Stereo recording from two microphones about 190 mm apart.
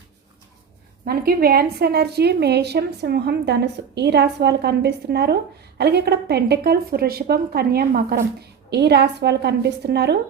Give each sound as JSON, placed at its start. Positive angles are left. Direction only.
{"t": 1.0, "sound": "a woman's voice", "side_deg": -55}